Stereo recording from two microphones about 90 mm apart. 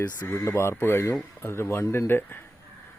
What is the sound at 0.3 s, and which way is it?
Speech, 30° left (ahead or behind).